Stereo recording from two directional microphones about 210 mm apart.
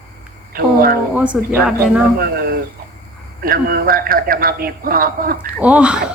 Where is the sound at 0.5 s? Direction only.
45° right (ahead or behind).